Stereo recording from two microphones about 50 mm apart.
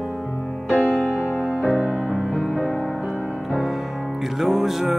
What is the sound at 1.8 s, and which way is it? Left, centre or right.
Music, right.